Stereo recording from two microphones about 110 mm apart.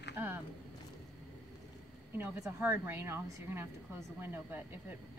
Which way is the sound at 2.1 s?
20° right (ahead or behind).